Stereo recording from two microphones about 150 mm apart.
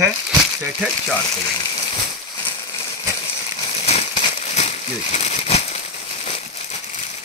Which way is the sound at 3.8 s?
50° left (ahead or behind).